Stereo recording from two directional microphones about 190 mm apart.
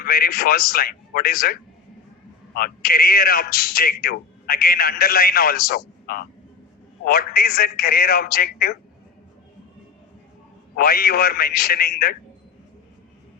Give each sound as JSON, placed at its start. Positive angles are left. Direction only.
{"t": 0.0, "sound": "a man's voice", "side_deg": 50}
{"t": 2.6, "sound": "a man's voice", "side_deg": 50}
{"t": 10.8, "sound": "a man's voice", "side_deg": 55}